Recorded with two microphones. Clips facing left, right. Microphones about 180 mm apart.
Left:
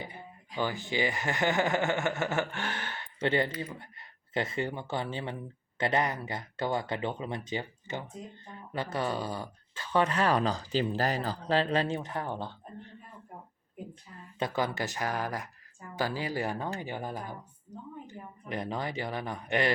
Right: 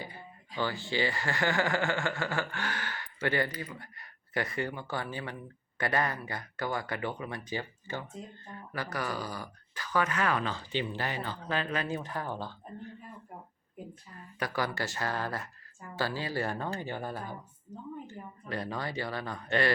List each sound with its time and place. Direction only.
0.0 s speech: 20° left (ahead or behind)
14.3 s speech: 20° left (ahead or behind)
18.4 s speech: 20° left (ahead or behind)